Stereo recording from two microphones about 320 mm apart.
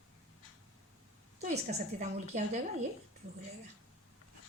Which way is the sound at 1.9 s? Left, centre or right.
Right.